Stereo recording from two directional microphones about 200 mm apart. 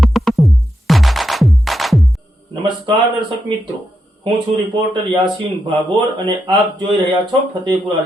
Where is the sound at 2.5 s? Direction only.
25° right (ahead or behind).